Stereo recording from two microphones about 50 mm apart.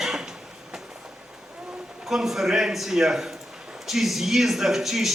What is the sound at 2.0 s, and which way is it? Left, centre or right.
A man's voice, centre.